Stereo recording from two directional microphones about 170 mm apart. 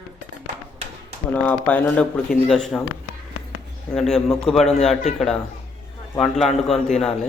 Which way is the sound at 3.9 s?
5° left (ahead or behind).